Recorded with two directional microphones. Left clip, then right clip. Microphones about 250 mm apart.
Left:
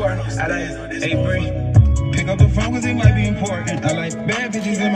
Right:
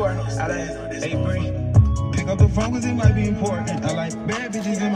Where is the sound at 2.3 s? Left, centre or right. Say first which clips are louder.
Left 2 dB; right.